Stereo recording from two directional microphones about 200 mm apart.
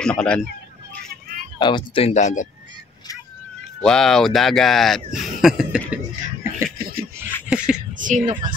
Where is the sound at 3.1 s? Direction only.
15° left (ahead or behind).